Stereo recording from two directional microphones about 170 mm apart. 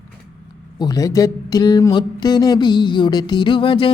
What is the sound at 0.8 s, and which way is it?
Speech, 20° left (ahead or behind).